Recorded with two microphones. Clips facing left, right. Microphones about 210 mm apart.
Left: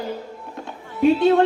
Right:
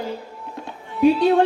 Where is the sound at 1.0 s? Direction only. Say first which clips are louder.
Even; 25° left (ahead or behind).